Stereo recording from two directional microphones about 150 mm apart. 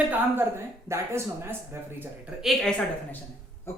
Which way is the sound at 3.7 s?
15° left (ahead or behind).